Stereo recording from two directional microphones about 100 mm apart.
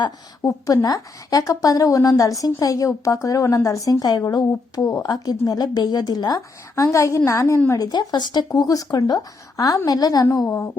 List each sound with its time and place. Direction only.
0.4 s a woman's voice: 35° left (ahead or behind)
7.7 s a woman's voice: 40° left (ahead or behind)